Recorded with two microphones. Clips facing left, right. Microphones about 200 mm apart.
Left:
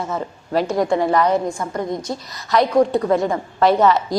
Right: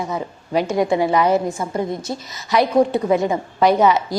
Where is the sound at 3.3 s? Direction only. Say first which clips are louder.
Even; 15° right (ahead or behind).